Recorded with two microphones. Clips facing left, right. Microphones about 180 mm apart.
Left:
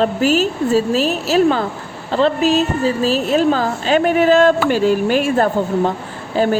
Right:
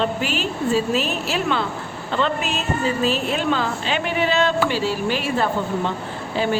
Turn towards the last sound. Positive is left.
turn(degrees=45)  # may be behind; listen again after turning